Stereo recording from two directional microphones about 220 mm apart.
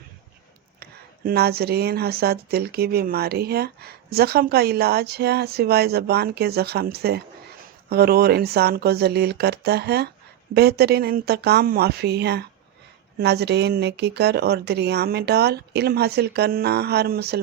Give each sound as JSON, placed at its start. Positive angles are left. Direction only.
{"t": 0.8, "sound": "speech", "side_deg": -45}